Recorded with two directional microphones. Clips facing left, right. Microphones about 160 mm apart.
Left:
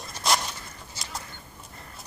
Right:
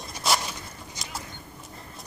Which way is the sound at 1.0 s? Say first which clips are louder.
Even; 15° right (ahead or behind).